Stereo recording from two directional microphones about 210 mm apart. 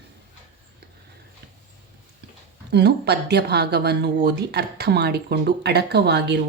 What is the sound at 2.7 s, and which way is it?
Speech, 50° right (ahead or behind).